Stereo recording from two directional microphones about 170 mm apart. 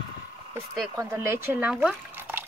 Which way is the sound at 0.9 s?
15° right (ahead or behind).